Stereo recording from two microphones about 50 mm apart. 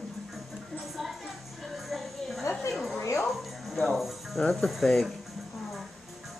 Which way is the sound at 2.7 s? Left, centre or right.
Centre.